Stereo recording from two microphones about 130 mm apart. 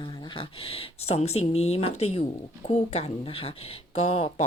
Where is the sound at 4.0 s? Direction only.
55° left (ahead or behind).